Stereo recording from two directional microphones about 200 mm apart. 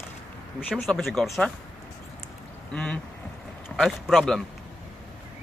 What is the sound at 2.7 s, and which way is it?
Speech, 5° left (ahead or behind).